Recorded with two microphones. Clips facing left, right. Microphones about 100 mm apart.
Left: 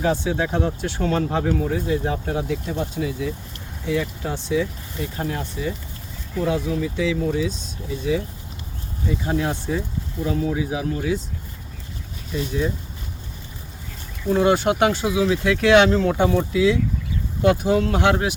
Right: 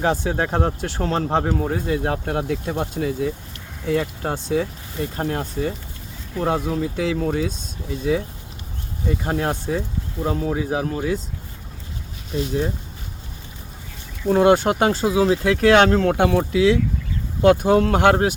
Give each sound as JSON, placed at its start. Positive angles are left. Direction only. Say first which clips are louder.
{"t": 0.0, "sound": "speech", "louder": "right 1 dB", "side_deg": -45}
{"t": 9.0, "sound": "speech", "louder": "right 1 dB", "side_deg": -55}
{"t": 14.3, "sound": "speech", "louder": "right 3 dB", "side_deg": -50}
{"t": 17.4, "sound": "speech", "louder": "right 3 dB", "side_deg": -55}